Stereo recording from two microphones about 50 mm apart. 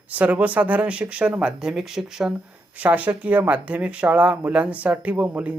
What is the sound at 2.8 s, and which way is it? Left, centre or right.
Speech, right.